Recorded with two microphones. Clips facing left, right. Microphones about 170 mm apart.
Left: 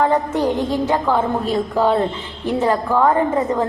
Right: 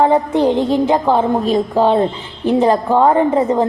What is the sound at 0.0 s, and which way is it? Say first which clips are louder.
A woman's voice: right 4 dB; 20° right (ahead or behind).